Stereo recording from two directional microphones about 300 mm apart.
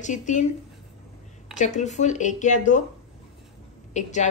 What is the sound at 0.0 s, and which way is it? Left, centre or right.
Speech, left.